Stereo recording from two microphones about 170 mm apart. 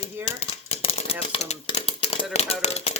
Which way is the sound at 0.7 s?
35° left (ahead or behind).